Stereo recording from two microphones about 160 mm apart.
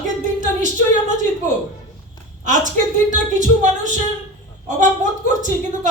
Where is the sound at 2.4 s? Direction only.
50° right (ahead or behind).